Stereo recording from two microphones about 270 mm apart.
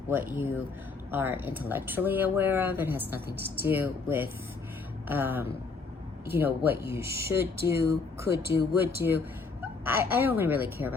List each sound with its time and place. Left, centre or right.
0.1 s speech: centre
7.0 s speech: right
7.3 s speech: centre